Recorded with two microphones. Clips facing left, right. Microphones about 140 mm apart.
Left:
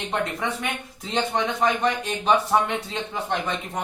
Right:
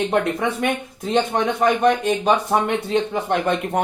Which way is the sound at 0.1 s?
50° right (ahead or behind).